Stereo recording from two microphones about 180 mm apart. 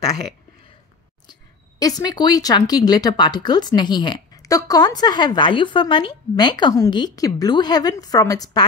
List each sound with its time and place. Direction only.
1.2 s speech: 20° left (ahead or behind)